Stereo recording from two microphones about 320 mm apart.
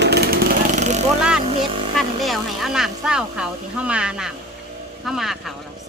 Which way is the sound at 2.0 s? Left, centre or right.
Centre.